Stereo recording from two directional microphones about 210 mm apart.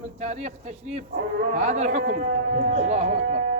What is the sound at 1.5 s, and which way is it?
Speech, 30° right (ahead or behind).